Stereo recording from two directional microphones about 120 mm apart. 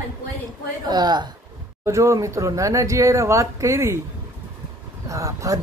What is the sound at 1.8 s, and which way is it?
Speech, 25° right (ahead or behind).